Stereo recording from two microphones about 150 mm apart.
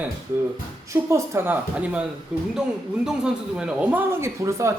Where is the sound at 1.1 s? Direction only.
20° right (ahead or behind).